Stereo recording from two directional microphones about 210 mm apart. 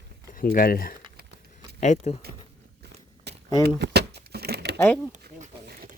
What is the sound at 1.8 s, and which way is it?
Speech, 30° left (ahead or behind).